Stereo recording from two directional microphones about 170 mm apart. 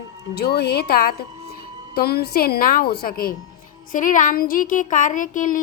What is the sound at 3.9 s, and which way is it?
Speech, 50° left (ahead or behind).